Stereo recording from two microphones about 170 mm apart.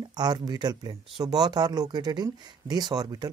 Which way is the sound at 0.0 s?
25° right (ahead or behind).